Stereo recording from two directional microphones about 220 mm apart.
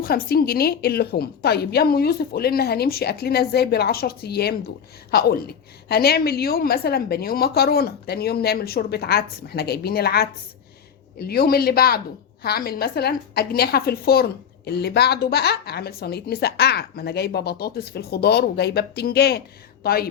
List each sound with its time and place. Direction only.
0.0 s a woman's voice: 45° left (ahead or behind)